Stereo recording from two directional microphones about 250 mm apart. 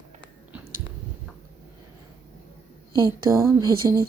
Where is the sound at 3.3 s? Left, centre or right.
Centre.